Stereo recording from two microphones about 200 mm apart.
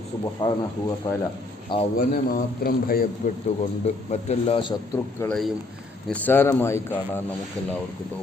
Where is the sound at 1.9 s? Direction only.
50° left (ahead or behind).